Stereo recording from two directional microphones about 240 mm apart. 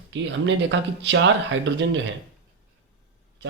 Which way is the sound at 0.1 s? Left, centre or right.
Right.